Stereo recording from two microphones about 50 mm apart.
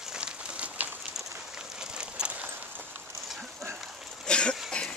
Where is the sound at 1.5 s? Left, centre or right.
Centre.